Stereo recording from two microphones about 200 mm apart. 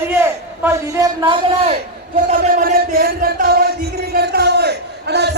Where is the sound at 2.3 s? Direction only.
40° right (ahead or behind).